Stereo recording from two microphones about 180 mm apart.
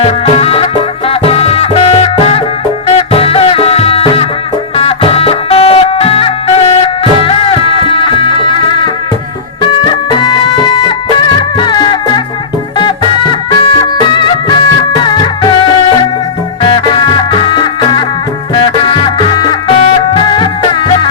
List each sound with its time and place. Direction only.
0.0 s music: 35° left (ahead or behind)